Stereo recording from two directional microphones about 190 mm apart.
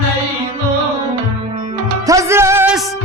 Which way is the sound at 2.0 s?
15° right (ahead or behind).